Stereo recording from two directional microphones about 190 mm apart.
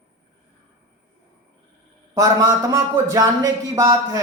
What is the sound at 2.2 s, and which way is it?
Speech, 15° right (ahead or behind).